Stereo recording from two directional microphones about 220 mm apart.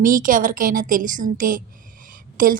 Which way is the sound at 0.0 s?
40° right (ahead or behind).